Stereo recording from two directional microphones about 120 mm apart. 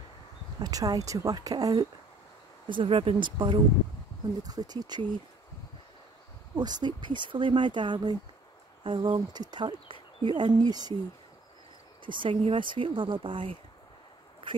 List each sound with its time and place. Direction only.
0.6 s speech: 30° right (ahead or behind)
2.7 s speech: 45° right (ahead or behind)
6.5 s speech: 35° right (ahead or behind)
12.1 s speech: 45° right (ahead or behind)